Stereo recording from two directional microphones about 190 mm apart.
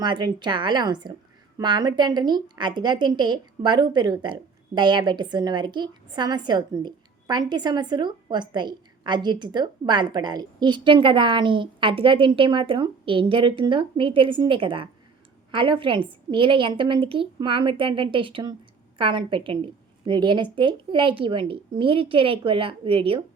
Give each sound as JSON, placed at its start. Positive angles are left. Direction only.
{"t": 0.0, "sound": "a woman's voice", "side_deg": -25}